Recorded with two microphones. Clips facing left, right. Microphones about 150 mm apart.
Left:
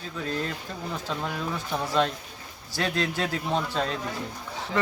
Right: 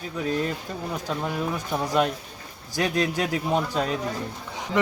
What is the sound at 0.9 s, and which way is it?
A man's voice, 15° right (ahead or behind).